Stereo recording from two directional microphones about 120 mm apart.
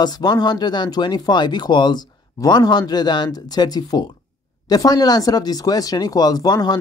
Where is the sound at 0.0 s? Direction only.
35° left (ahead or behind).